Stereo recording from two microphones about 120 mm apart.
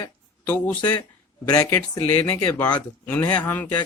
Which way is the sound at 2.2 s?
20° left (ahead or behind).